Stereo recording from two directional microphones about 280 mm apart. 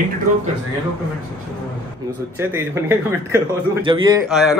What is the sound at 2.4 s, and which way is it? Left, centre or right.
Speech, centre.